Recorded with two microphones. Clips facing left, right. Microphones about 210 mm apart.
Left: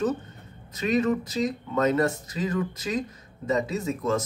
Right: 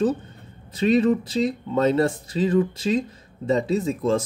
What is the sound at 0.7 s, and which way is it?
Speech, 30° right (ahead or behind).